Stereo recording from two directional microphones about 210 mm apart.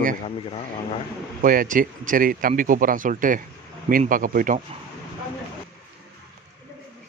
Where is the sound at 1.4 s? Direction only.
40° right (ahead or behind).